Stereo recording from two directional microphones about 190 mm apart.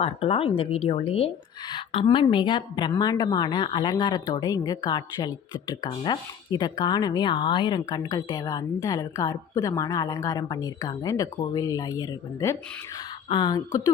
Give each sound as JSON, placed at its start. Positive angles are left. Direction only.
{"t": 0.0, "sound": "a woman's voice", "side_deg": 30}